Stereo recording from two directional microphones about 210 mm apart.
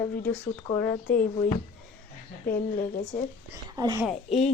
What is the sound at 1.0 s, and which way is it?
Speech, 40° left (ahead or behind).